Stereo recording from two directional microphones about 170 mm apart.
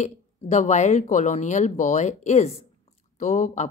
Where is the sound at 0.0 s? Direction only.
45° left (ahead or behind).